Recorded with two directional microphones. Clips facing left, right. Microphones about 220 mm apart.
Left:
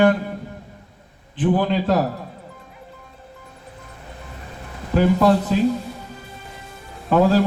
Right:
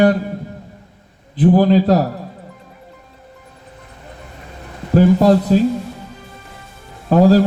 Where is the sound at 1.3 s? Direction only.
40° right (ahead or behind).